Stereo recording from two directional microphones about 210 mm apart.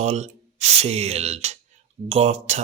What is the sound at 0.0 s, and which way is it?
Speech, 30° right (ahead or behind).